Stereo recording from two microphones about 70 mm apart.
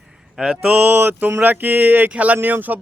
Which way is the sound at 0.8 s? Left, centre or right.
Right.